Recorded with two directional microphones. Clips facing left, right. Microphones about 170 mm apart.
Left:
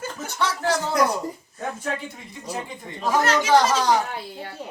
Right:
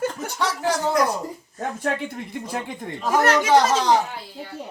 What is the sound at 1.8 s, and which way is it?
Speech, 60° right (ahead or behind).